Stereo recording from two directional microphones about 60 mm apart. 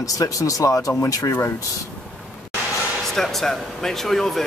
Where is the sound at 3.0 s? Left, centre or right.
Centre.